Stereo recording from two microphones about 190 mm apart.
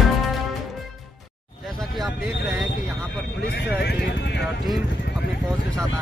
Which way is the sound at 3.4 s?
60° left (ahead or behind).